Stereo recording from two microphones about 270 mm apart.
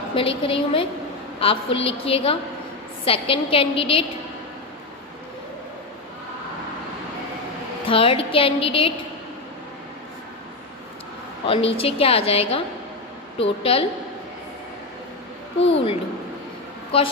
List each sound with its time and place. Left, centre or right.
0.1 s a woman's voice: centre
7.9 s a woman's voice: centre
11.4 s a woman's voice: left
16.9 s a woman's voice: centre